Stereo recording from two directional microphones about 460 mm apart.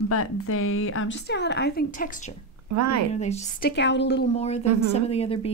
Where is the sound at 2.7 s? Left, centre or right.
Right.